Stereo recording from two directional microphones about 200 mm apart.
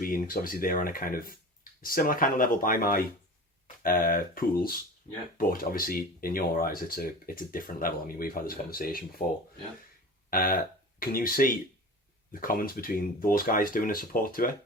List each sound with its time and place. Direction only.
0.0 s speech: 45° left (ahead or behind)
10.2 s speech: 45° left (ahead or behind)